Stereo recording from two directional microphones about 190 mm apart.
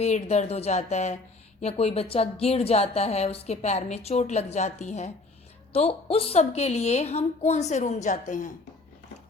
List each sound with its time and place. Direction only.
0.0 s a woman's voice: 35° left (ahead or behind)